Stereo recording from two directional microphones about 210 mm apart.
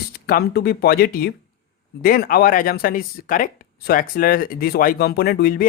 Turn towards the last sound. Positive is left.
turn(degrees=45)  # may be behind; listen again after turning